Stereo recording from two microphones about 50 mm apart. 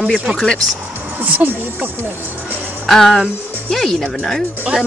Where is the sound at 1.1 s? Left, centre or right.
Right.